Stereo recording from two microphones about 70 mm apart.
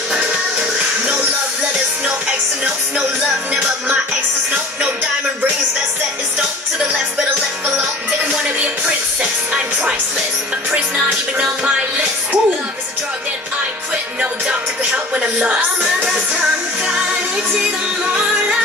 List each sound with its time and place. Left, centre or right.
0.2 s music: centre
2.6 s music: centre
8.3 s music: centre
14.5 s speech: centre
17.6 s music: centre